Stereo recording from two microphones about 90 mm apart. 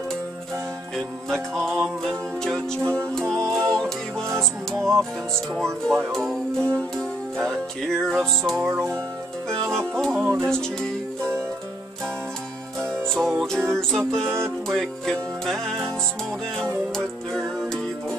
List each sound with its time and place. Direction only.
0.9 s music: 5° left (ahead or behind)
6.1 s music: 5° left (ahead or behind)
8.6 s music: 30° right (ahead or behind)
9.5 s music: 5° left (ahead or behind)
12.8 s music: 5° left (ahead or behind)
16.9 s music: 5° left (ahead or behind)